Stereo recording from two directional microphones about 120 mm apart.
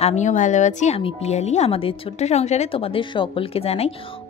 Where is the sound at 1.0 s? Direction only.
65° left (ahead or behind).